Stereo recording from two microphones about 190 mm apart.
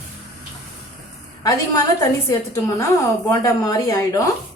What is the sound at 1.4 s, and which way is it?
A woman's voice, 20° left (ahead or behind).